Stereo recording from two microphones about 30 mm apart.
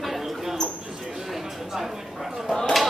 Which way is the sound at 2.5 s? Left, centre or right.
Centre.